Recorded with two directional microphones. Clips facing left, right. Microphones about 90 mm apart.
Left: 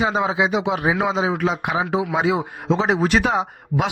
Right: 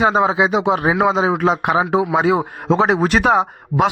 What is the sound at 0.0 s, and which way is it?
A man's voice, 45° right (ahead or behind).